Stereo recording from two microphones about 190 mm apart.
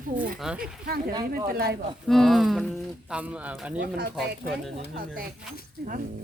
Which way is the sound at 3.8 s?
55° right (ahead or behind).